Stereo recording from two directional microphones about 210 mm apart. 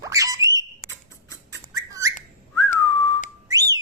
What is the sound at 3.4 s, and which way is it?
Whistle, 15° right (ahead or behind).